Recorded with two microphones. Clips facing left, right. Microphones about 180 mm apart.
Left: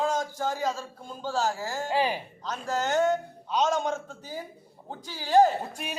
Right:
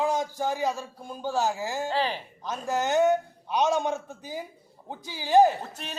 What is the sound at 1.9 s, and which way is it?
Speech, 10° left (ahead or behind).